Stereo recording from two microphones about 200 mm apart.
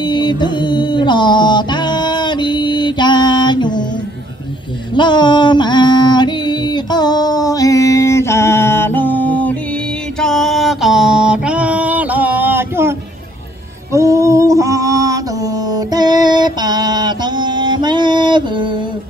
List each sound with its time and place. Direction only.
0.0 s mantra: 20° left (ahead or behind)
4.9 s a sound: 20° left (ahead or behind); by 12.9 s 10° right (ahead or behind)
13.9 s mantra: 15° right (ahead or behind)